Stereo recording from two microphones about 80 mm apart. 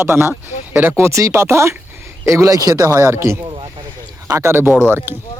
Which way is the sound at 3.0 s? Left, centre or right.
Right.